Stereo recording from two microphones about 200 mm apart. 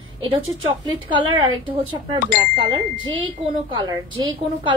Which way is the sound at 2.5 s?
25° right (ahead or behind).